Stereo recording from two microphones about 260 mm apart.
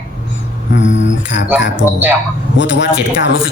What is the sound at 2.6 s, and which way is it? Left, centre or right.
Speech, left.